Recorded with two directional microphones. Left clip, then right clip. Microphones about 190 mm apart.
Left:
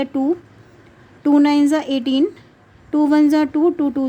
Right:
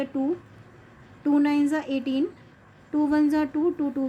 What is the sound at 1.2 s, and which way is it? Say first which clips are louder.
A woman's voice: left 8 dB; 45° left (ahead or behind).